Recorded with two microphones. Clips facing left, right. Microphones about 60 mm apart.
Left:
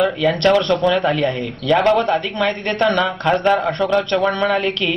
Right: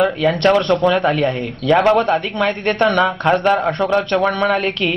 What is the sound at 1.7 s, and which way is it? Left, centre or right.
Speech, centre.